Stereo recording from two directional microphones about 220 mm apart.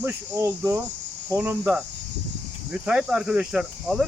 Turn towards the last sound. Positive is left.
turn(degrees=0)  # may be behind; listen again after turning